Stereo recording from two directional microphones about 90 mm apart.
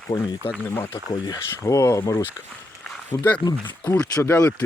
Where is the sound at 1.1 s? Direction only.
45° left (ahead or behind).